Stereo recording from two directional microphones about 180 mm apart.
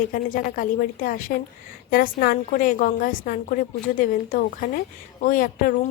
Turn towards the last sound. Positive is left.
turn(degrees=50)  # may be behind; listen again after turning